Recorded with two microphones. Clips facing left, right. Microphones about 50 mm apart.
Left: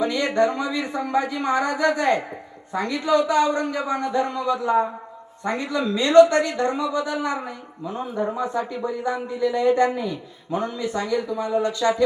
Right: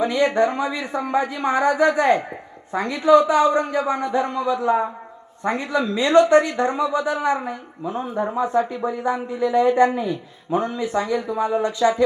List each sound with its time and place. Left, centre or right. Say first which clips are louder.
0.0 s speech: right 2 dB; right